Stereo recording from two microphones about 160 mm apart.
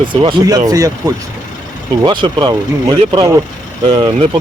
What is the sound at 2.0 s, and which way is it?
Speech, 30° right (ahead or behind).